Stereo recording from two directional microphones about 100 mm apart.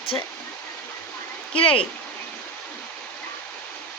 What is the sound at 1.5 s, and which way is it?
Speech, 65° left (ahead or behind).